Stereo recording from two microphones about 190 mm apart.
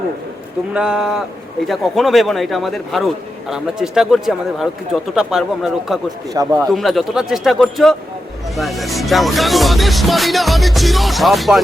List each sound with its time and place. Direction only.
0.7 s music: 5° right (ahead or behind)
6.3 s a man's voice: 20° right (ahead or behind)
6.7 s music: centre (ahead or behind)